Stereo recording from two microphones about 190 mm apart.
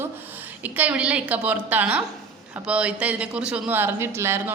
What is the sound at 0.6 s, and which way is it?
A woman's voice, 10° right (ahead or behind).